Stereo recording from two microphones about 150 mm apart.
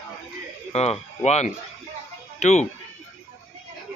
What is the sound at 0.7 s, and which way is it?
Speech, 45° left (ahead or behind).